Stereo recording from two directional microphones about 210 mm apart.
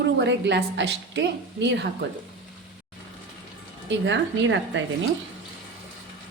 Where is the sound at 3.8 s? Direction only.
60° right (ahead or behind).